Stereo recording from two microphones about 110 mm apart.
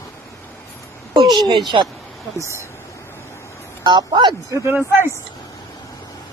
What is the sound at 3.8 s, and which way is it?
Speech, 40° right (ahead or behind).